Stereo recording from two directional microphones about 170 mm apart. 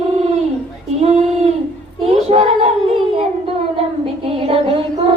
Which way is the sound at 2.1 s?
40° right (ahead or behind).